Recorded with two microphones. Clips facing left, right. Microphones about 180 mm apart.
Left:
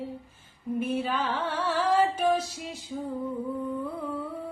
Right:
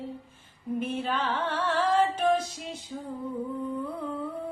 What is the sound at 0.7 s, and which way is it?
Music, 5° left (ahead or behind).